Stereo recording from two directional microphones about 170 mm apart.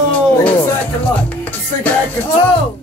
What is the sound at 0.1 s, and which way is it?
Music, 5° left (ahead or behind).